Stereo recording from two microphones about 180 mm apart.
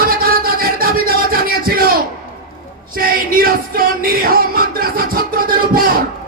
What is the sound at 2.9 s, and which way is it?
Music, 55° right (ahead or behind).